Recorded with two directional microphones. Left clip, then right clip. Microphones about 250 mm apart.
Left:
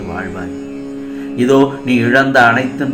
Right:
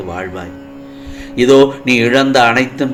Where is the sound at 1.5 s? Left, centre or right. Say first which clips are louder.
Right 3 dB; right.